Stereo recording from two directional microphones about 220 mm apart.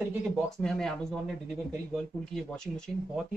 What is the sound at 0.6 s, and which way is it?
Speech, centre (ahead or behind).